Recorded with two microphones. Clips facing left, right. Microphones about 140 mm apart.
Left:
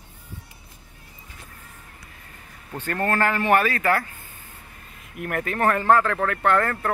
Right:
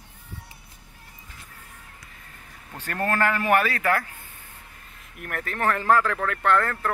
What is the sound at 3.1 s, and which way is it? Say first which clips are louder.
Speech: left 1 dB; 5° left (ahead or behind).